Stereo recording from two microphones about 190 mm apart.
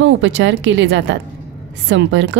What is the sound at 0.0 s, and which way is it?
A woman's voice, 75° right (ahead or behind).